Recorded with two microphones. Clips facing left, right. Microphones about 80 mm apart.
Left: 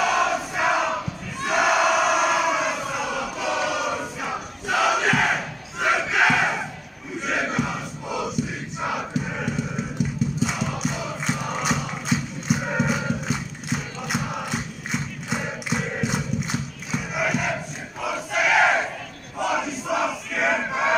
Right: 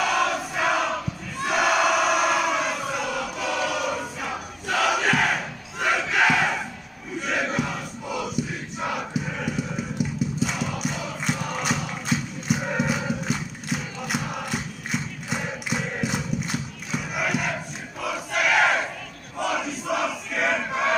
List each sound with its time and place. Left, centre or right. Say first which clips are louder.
0.0 s crowd: left 2 dB; centre
9.2 s music: left 1 dB; centre
16.9 s crowd: left 1 dB; centre
19.3 s battle cry: left 2 dB; centre